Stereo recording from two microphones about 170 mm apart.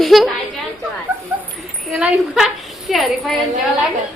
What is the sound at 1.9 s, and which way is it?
A woman's voice, 5° right (ahead or behind).